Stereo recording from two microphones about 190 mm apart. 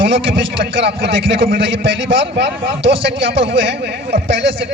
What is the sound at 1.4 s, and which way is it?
A man's voice, 60° right (ahead or behind).